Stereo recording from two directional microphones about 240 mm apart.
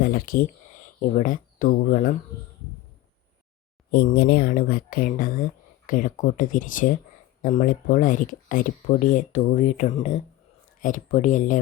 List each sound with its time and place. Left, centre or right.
0.0 s speech: left
3.9 s speech: left